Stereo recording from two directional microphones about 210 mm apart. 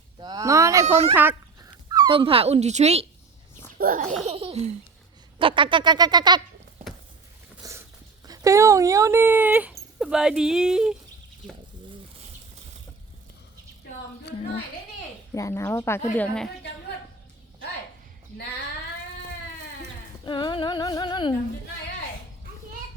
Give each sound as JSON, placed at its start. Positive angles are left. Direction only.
{"t": 0.2, "sound": "a sound", "side_deg": -15}
{"t": 1.1, "sound": "speech", "side_deg": -10}
{"t": 3.8, "sound": "a child's voice", "side_deg": -40}
{"t": 4.3, "sound": "a child's voice", "side_deg": -30}
{"t": 5.4, "sound": "bird", "side_deg": -25}
{"t": 7.5, "sound": "speech", "side_deg": -10}
{"t": 14.3, "sound": "a sound", "side_deg": 50}
{"t": 15.4, "sound": "a woman's voice", "side_deg": 15}
{"t": 20.2, "sound": "female singing", "side_deg": 20}